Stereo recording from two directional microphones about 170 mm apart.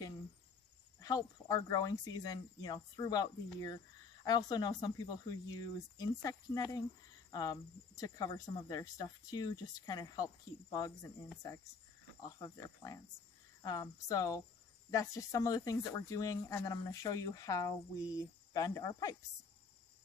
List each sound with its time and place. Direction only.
1.0 s speech: 20° left (ahead or behind)
12.2 s speech: 20° left (ahead or behind)